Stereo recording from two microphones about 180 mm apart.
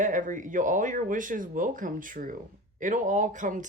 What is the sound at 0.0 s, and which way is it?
Speech, 45° right (ahead or behind).